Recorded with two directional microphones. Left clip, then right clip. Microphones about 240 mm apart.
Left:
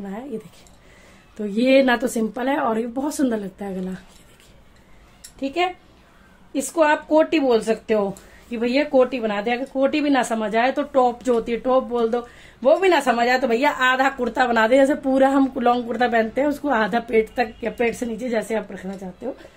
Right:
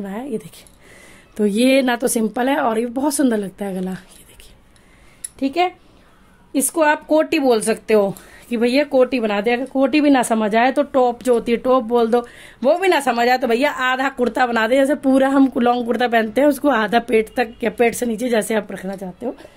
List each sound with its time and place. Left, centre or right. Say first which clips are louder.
0.0 s speech: right 5 dB; right
1.3 s speech: right 2 dB; right
5.4 s speech: right 4 dB; right